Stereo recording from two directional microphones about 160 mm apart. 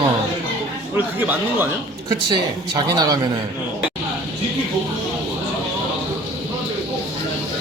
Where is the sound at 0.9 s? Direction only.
10° right (ahead or behind).